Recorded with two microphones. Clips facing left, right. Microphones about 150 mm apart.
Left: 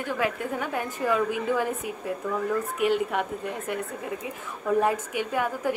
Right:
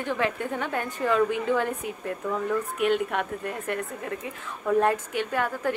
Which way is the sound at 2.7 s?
65° right (ahead or behind).